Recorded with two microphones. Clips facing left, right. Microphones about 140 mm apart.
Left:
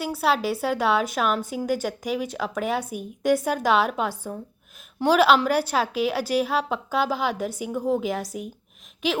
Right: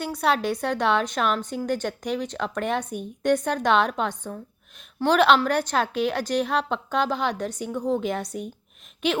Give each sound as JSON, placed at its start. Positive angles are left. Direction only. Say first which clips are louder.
{"t": 0.0, "sound": "a woman's voice", "louder": "even", "side_deg": 5}